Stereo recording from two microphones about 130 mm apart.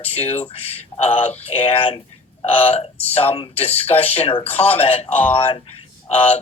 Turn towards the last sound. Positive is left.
turn(degrees=50)  # may be behind; listen again after turning